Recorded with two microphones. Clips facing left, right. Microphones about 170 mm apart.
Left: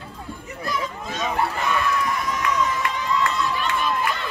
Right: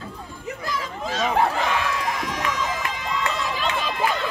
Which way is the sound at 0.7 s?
90° right.